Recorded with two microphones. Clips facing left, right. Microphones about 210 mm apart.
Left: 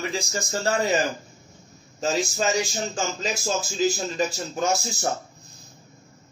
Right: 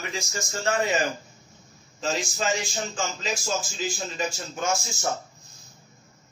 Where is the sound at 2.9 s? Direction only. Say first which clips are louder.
Left 2 dB; 40° left (ahead or behind).